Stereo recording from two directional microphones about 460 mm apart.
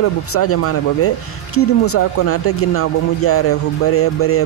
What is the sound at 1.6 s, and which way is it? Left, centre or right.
Speech, left.